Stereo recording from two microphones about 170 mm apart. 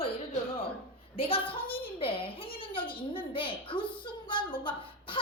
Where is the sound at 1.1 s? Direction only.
35° left (ahead or behind).